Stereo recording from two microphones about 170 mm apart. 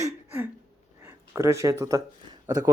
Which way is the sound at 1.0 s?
15° right (ahead or behind).